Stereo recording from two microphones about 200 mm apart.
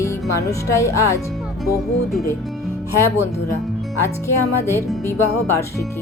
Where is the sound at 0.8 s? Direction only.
15° left (ahead or behind).